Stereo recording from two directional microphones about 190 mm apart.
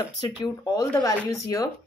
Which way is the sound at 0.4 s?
20° left (ahead or behind).